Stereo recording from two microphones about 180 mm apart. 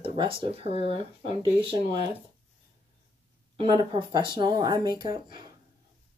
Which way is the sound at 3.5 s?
25° right (ahead or behind).